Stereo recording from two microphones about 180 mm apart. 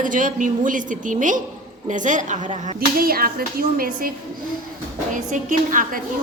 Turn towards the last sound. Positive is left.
turn(degrees=-45)  # may be behind; listen again after turning